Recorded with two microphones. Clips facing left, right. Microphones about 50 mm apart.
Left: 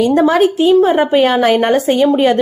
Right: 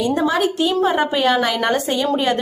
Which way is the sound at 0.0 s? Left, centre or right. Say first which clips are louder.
Left 7 dB; left.